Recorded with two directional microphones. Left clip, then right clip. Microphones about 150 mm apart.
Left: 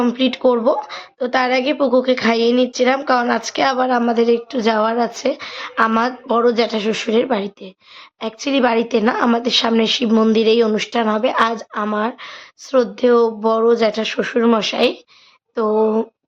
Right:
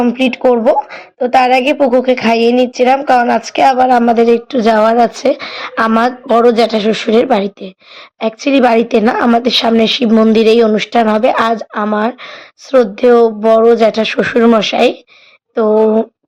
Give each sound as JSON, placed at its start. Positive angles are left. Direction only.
{"t": 0.0, "sound": "a woman's voice", "side_deg": -10}
{"t": 14.4, "sound": "a woman's voice", "side_deg": -25}